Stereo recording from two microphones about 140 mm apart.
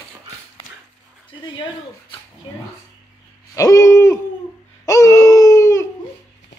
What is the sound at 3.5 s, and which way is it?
Hoot, 20° left (ahead or behind).